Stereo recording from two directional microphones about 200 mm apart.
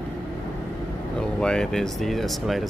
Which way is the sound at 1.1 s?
5° left (ahead or behind).